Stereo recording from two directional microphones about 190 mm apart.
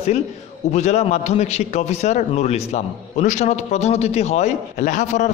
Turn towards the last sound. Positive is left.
turn(degrees=40)  # may be behind; listen again after turning